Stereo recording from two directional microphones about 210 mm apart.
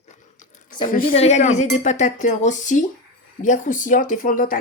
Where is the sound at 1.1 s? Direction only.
30° left (ahead or behind).